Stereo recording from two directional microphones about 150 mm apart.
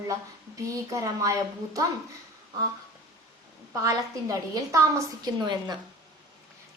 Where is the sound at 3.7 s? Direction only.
20° right (ahead or behind).